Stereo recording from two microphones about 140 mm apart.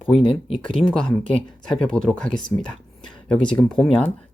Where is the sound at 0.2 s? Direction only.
40° left (ahead or behind).